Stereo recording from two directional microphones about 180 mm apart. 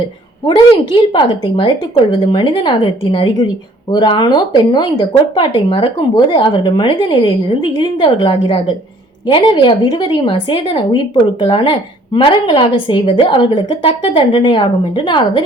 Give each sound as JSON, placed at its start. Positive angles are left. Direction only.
{"t": 1.1, "sound": "a woman's voice", "side_deg": 25}